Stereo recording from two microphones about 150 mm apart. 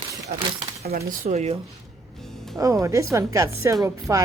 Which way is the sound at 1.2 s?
45° right (ahead or behind).